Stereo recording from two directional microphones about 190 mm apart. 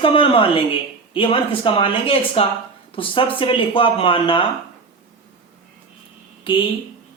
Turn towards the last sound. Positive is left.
turn(degrees=25)  # may be behind; listen again after turning